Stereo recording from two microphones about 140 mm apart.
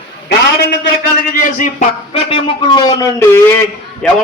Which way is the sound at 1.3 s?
70° left (ahead or behind).